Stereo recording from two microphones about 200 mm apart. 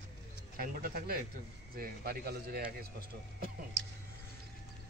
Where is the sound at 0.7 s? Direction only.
45° right (ahead or behind).